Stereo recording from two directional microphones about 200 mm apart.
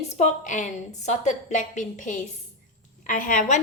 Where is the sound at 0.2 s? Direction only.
40° left (ahead or behind).